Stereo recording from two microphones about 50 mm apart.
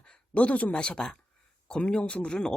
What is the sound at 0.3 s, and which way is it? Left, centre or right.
Speech, left.